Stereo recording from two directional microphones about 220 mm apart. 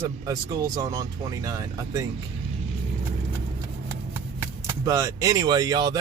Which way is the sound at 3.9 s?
10° right (ahead or behind).